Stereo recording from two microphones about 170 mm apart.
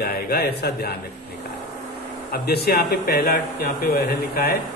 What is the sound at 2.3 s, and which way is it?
Speech, 65° left (ahead or behind).